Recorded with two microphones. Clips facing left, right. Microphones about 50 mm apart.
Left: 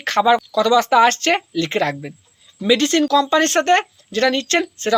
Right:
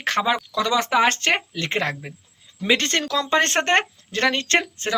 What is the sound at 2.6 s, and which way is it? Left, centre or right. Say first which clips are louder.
Speech: left 5 dB; right.